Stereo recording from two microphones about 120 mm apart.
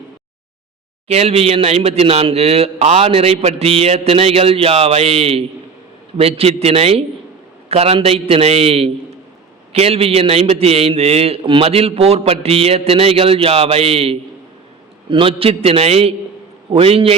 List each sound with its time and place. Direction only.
1.0 s a man's voice: 60° right (ahead or behind)